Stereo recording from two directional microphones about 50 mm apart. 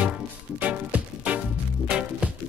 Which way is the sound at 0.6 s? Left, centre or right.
Right.